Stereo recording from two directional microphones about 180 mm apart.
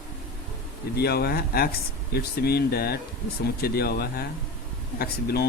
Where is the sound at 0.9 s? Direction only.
60° left (ahead or behind).